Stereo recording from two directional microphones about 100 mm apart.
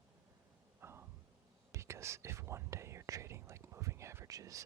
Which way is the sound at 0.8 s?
25° right (ahead or behind).